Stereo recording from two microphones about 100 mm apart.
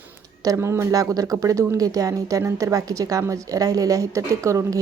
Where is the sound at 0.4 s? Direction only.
25° right (ahead or behind).